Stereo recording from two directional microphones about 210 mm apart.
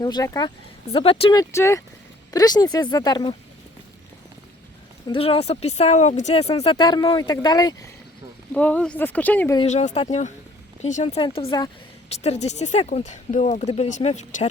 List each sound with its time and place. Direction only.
0.0 s speech: 20° left (ahead or behind)
5.0 s speech: 25° left (ahead or behind)
8.5 s speech: 5° left (ahead or behind)
9.6 s speech: 35° left (ahead or behind)